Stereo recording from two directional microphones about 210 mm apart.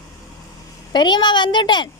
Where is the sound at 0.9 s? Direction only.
20° left (ahead or behind).